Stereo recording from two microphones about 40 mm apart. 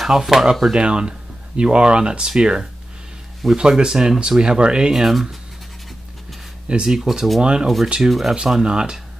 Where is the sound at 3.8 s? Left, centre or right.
Centre.